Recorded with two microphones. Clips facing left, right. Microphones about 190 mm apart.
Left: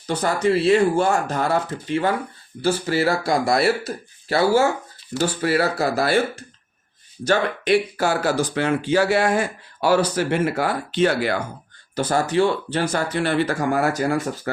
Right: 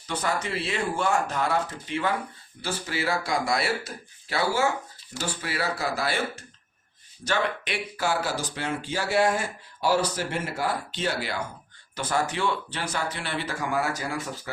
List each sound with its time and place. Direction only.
0.2 s speech: 40° left (ahead or behind)
2.6 s speech: 40° left (ahead or behind)
5.1 s speech: 65° left (ahead or behind)
5.7 s speech: 40° left (ahead or behind)
7.3 s speech: 40° left (ahead or behind)
11.9 s speech: 35° left (ahead or behind); by 14.5 s 55° left (ahead or behind)